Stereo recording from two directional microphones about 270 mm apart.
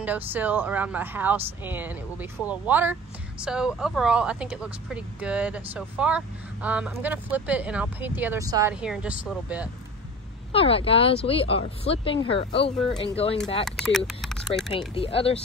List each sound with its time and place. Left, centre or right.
0.0 s speech: centre
10.5 s speech: left
13.7 s speech: centre
15.0 s speech: left